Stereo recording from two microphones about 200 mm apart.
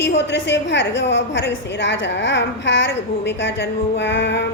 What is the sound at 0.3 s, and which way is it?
A woman's voice, 60° left (ahead or behind).